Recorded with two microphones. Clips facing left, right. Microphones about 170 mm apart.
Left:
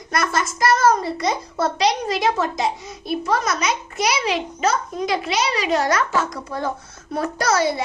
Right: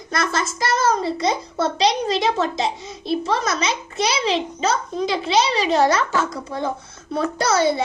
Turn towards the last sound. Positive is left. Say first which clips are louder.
# right 1 dB
turn(degrees=-25)  # may be behind; listen again after turning